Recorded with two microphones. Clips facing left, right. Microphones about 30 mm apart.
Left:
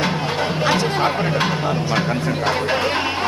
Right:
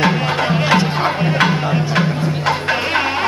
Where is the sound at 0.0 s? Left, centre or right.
Right.